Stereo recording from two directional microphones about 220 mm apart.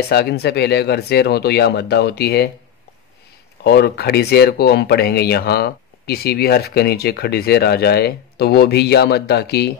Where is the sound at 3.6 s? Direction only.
50° left (ahead or behind).